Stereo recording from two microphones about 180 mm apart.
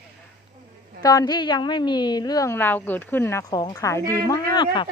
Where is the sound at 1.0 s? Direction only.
20° left (ahead or behind).